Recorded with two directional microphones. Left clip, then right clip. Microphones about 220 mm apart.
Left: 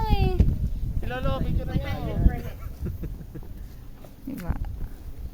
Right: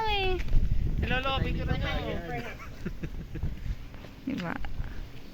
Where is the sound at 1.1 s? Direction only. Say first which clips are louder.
Right 1 dB; 55° left (ahead or behind).